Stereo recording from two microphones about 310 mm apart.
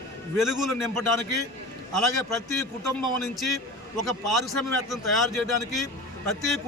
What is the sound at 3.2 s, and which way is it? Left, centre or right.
A man's voice, centre.